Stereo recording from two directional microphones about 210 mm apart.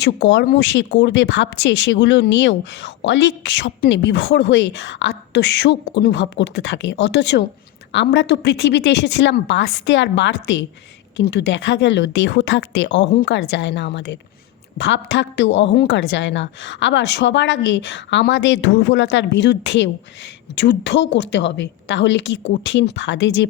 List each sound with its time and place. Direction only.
0.0 s a woman's voice: 60° left (ahead or behind)